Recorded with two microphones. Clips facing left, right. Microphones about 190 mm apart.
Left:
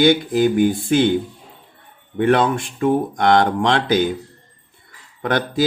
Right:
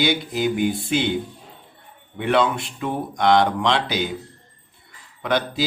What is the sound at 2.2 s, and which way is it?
Speech, 45° left (ahead or behind).